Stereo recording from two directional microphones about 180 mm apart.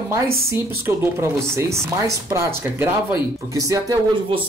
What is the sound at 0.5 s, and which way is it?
Speech, 15° right (ahead or behind).